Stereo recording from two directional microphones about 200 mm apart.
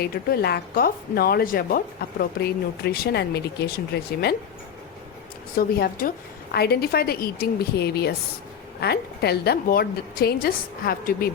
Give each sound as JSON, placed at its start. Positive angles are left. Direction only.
{"t": 0.0, "sound": "speech", "side_deg": 50}
{"t": 5.5, "sound": "speech", "side_deg": 50}